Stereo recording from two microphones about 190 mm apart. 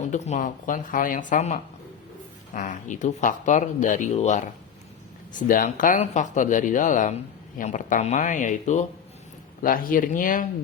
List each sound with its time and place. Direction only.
0.0 s speech: 35° left (ahead or behind)